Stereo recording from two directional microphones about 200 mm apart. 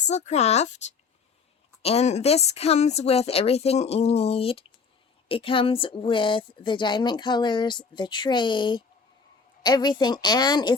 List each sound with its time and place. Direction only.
0.0 s speech: 35° left (ahead or behind)
1.8 s speech: 30° left (ahead or behind)